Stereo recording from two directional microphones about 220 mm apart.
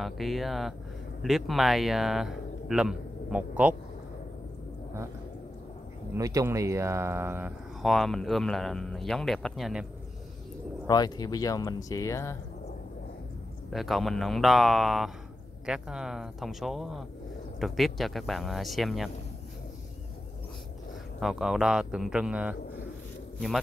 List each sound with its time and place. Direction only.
0.0 s speech: centre (ahead or behind)
6.1 s speech: 15° right (ahead or behind)
10.9 s speech: 15° left (ahead or behind)
13.7 s speech: centre (ahead or behind)
21.2 s speech: centre (ahead or behind)